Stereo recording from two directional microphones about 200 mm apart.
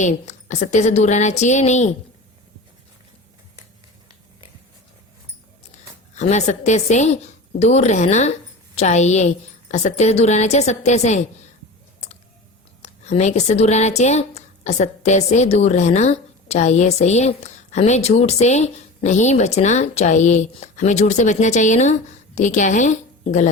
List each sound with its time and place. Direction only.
0.0 s speech: 35° left (ahead or behind)
6.1 s speech: 35° left (ahead or behind)
12.8 s a woman's voice: 35° left (ahead or behind)